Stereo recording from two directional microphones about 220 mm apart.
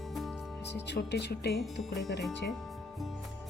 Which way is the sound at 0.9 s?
50° left (ahead or behind).